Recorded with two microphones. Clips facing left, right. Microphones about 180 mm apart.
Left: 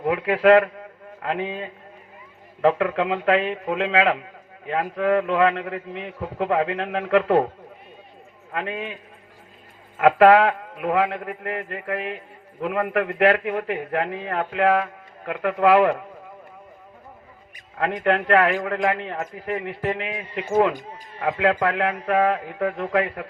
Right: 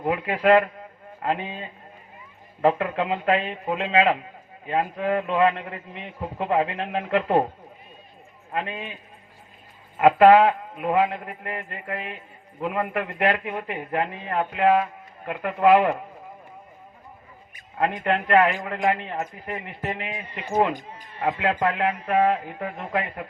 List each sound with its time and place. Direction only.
0.1 s a man's voice: 70° left (ahead or behind)
8.5 s a man's voice: 60° left (ahead or behind)
10.0 s a man's voice: 70° left (ahead or behind)
17.7 s a man's voice: 60° left (ahead or behind)
21.2 s a man's voice: 65° left (ahead or behind)